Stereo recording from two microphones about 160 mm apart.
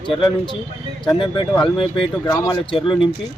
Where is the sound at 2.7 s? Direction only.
30° left (ahead or behind).